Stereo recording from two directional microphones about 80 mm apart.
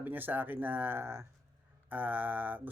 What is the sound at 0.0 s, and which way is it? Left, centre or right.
Speech, right.